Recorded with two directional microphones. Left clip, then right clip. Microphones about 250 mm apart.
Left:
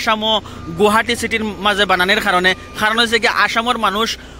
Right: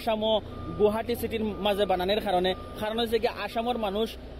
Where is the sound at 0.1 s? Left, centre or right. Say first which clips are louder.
Left 9 dB; centre.